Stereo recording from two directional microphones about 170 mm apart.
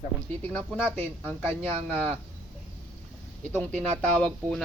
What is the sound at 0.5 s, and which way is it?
Speech, 5° left (ahead or behind).